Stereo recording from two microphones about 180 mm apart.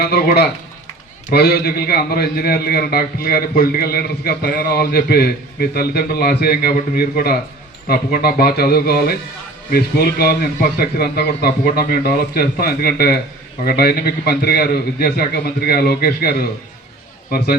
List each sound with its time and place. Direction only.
0.0 s a man's voice: 60° left (ahead or behind)